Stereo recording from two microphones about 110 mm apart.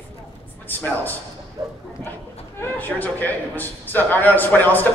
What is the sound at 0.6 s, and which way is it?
Speech, 15° left (ahead or behind).